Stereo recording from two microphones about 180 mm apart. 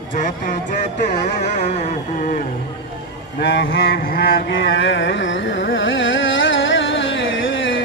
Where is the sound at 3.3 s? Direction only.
70° left (ahead or behind); by 3.9 s 90° left.